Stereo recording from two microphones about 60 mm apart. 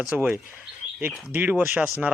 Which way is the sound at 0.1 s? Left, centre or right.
Right.